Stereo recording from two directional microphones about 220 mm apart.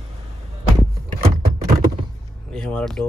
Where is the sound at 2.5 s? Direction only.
5° left (ahead or behind).